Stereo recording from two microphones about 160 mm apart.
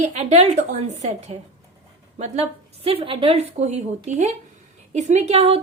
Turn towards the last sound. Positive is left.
turn(degrees=-40)  # may be behind; listen again after turning